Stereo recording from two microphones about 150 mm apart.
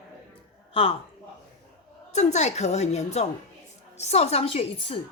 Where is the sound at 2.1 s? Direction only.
50° left (ahead or behind).